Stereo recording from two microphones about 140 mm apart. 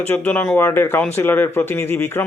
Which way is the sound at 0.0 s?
15° left (ahead or behind).